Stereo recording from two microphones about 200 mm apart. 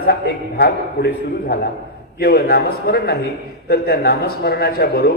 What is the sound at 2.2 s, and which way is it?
A man's voice, 50° left (ahead or behind).